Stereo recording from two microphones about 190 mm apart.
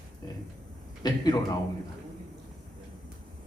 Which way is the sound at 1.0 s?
20° left (ahead or behind).